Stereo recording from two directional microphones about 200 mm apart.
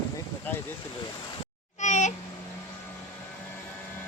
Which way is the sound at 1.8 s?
35° left (ahead or behind).